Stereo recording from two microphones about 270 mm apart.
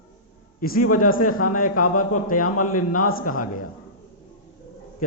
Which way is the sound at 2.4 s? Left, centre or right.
Left.